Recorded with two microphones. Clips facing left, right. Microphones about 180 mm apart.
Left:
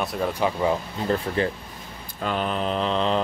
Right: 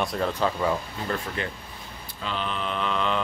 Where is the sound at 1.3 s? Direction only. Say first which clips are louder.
Left 7 dB; 35° left (ahead or behind).